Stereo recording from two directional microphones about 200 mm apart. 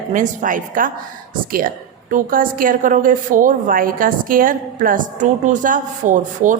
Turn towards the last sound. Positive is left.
turn(degrees=-40)  # may be behind; listen again after turning